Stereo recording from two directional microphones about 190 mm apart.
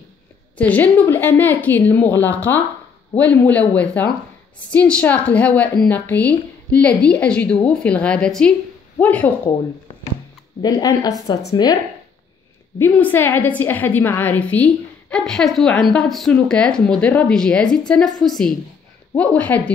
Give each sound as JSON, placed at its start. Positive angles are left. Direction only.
{"t": 0.6, "sound": "a woman's voice", "side_deg": 10}
{"t": 10.6, "sound": "a woman's voice", "side_deg": 20}
{"t": 12.7, "sound": "a woman's voice", "side_deg": 10}